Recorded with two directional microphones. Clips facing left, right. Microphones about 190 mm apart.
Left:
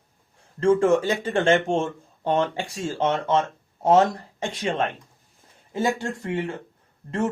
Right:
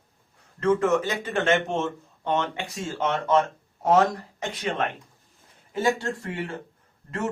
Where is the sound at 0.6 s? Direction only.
30° left (ahead or behind).